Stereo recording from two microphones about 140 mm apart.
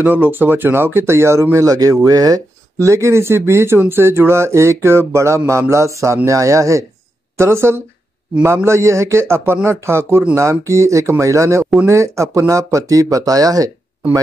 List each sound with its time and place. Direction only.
0.0 s speech: 10° right (ahead or behind)